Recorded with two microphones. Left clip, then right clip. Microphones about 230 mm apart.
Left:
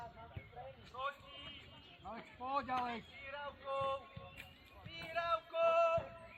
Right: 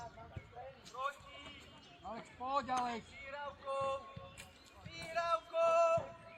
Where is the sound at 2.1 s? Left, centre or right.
Right.